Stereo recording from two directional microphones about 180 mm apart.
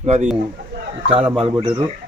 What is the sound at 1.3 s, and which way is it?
Speech, 30° right (ahead or behind).